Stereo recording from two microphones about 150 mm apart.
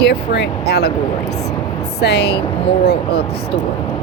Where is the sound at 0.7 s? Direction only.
90° left.